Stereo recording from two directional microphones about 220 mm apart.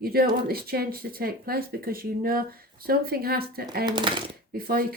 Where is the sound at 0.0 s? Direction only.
45° right (ahead or behind).